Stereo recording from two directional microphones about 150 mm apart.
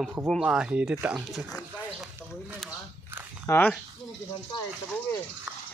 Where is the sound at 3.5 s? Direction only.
20° left (ahead or behind).